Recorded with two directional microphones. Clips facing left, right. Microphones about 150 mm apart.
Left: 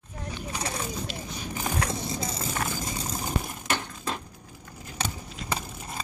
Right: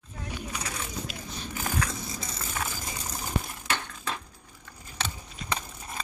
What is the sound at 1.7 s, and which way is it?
Vehicle, 30° left (ahead or behind).